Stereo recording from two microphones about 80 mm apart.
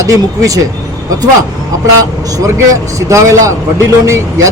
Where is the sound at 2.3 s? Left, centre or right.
Right.